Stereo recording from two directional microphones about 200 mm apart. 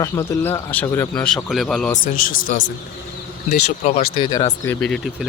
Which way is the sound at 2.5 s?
40° left (ahead or behind).